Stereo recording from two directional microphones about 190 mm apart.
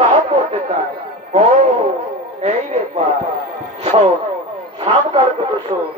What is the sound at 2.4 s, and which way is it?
Speech, 35° right (ahead or behind).